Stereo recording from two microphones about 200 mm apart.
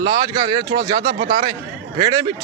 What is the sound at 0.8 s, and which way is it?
Speech, 40° right (ahead or behind).